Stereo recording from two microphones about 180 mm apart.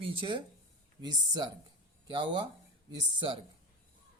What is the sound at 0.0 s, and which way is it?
Speech, 30° right (ahead or behind).